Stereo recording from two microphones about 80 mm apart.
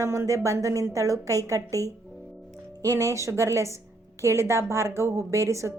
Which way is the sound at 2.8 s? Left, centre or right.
Right.